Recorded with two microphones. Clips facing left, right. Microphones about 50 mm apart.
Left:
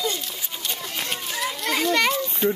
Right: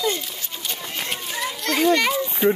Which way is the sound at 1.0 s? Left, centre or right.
Centre.